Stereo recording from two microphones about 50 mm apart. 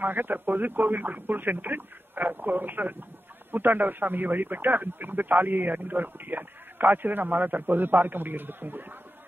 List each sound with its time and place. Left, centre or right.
0.0 s speech: right